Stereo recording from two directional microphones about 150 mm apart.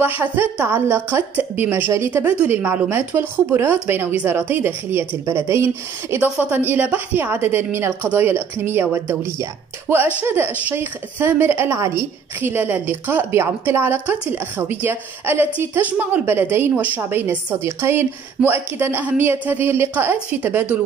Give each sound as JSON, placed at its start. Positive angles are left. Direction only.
{"t": 0.0, "sound": "a woman's voice", "side_deg": -10}